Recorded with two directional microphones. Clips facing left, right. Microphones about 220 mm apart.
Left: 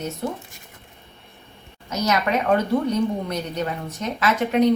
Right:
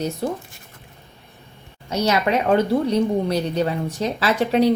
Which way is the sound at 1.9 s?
30° right (ahead or behind).